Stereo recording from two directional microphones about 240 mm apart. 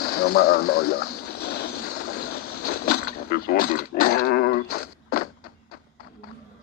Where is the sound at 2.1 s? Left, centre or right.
Left.